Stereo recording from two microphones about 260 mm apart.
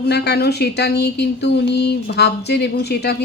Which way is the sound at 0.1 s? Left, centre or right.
Left.